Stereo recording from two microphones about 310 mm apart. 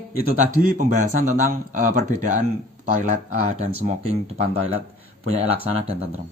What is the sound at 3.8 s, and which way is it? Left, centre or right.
Speech, centre.